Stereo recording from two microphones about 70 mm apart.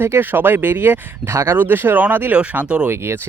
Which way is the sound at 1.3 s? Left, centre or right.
Right.